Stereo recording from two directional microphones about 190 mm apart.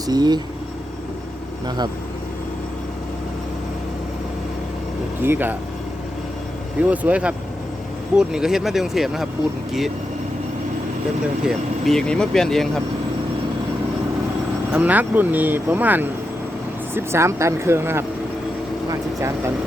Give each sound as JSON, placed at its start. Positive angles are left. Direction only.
{"t": 0.1, "sound": "speech", "side_deg": -20}
{"t": 1.6, "sound": "speech", "side_deg": -20}
{"t": 5.2, "sound": "speech", "side_deg": -10}
{"t": 6.9, "sound": "speech", "side_deg": -5}
{"t": 11.4, "sound": "speech", "side_deg": 0}
{"t": 14.7, "sound": "speech", "side_deg": -10}